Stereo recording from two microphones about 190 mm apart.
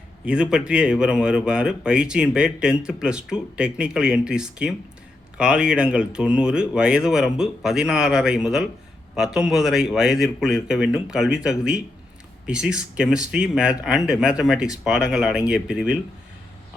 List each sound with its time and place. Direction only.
0.3 s speech: 5° right (ahead or behind)